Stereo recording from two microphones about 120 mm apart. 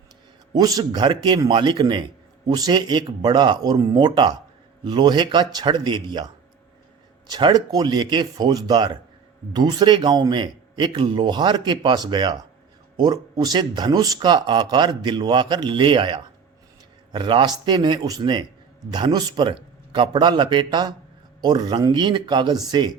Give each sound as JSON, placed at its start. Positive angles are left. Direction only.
{"t": 0.5, "sound": "a man's voice", "side_deg": -30}